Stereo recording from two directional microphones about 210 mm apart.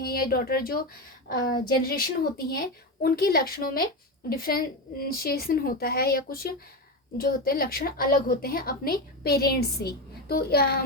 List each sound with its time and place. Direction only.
0.0 s a woman's voice: 45° left (ahead or behind)